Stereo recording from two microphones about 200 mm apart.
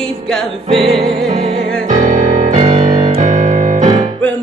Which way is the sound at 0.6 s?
25° right (ahead or behind).